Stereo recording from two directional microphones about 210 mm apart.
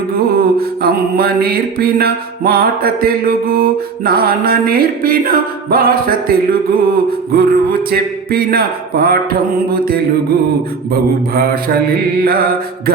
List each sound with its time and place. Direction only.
0.3 s mantra: 45° right (ahead or behind)